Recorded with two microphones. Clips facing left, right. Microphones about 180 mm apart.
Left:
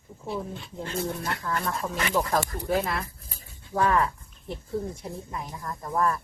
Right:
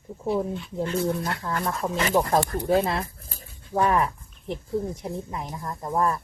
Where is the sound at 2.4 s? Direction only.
60° right (ahead or behind).